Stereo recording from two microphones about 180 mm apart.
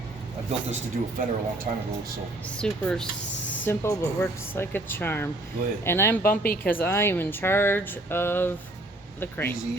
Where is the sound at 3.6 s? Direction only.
15° left (ahead or behind).